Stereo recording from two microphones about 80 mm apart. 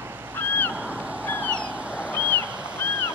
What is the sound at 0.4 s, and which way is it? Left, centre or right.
Goose, left.